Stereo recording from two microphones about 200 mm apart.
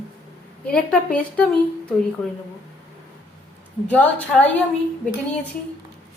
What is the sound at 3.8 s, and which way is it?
Speech, 5° left (ahead or behind).